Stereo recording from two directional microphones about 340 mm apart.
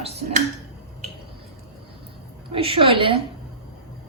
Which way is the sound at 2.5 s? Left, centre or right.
Centre.